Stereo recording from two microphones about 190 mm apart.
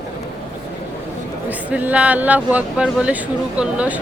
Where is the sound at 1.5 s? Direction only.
10° right (ahead or behind).